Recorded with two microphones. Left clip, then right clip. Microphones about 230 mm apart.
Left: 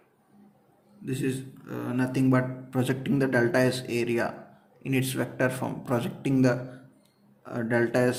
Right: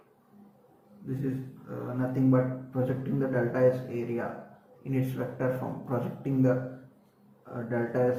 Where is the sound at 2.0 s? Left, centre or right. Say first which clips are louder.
Left 1 dB; left.